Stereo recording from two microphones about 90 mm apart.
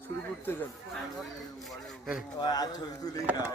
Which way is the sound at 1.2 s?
Centre (ahead or behind).